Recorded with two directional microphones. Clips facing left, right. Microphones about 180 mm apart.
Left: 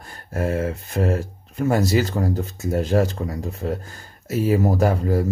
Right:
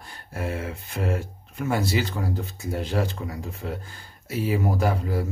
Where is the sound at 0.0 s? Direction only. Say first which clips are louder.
Left 6 dB; 45° left (ahead or behind).